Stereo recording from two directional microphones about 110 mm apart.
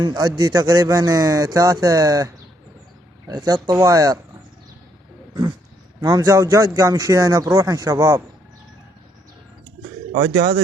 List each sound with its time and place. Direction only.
0.0 s a man's voice: 35° right (ahead or behind)
3.4 s a man's voice: 30° right (ahead or behind)
6.0 s speech: 30° right (ahead or behind)